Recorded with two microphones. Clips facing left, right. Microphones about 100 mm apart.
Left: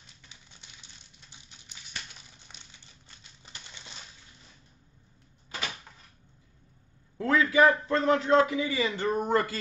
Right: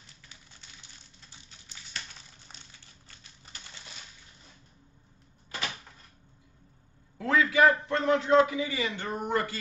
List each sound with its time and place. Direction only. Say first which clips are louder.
0.3 s a sound: right 1 dB; 20° left (ahead or behind)
3.4 s crumpling: even; 20° left (ahead or behind)
7.2 s a man's voice: left 1 dB; 30° left (ahead or behind)